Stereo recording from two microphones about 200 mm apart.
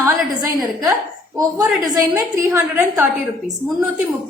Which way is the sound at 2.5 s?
10° right (ahead or behind).